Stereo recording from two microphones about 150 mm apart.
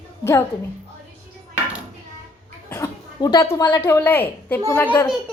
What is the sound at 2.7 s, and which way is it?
A woman's voice, 20° left (ahead or behind).